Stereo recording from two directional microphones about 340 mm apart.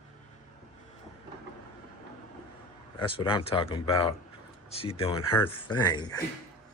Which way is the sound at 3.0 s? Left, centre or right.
Centre.